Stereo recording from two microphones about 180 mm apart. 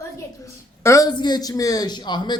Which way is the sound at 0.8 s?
15° left (ahead or behind).